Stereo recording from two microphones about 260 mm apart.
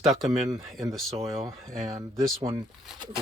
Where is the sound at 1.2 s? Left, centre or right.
Centre.